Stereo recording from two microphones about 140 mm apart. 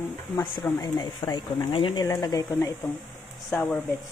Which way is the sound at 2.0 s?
30° left (ahead or behind).